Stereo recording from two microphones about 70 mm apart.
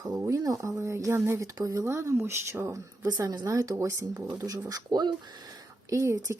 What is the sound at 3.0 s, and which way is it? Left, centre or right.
Speech, right.